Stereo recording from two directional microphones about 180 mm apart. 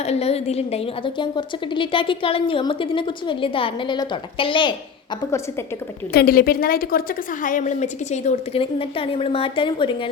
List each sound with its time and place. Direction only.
0.0 s a woman's voice: 35° left (ahead or behind)
6.1 s a woman's voice: 55° left (ahead or behind); by 10.1 s 25° left (ahead or behind)